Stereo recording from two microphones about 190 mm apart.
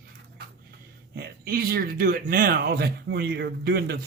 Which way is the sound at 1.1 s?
55° right (ahead or behind).